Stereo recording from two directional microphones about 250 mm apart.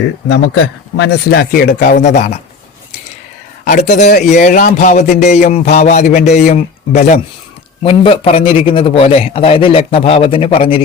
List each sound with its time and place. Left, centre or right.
0.3 s a man's voice: left
3.6 s a man's voice: left